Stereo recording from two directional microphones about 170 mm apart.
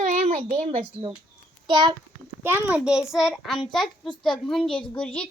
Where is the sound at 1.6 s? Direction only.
25° right (ahead or behind).